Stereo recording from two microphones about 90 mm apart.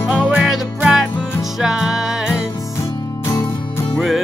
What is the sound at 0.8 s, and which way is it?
Music, 5° right (ahead or behind).